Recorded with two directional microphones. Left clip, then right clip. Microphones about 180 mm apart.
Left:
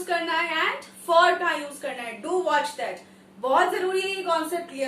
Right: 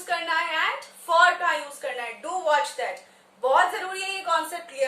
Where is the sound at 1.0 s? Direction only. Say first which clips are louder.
Even; 20° right (ahead or behind).